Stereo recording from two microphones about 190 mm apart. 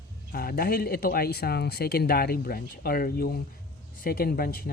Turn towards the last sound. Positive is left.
turn(degrees=50)  # may be behind; listen again after turning